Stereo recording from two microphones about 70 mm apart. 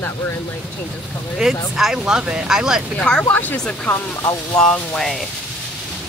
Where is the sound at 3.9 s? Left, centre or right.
Left.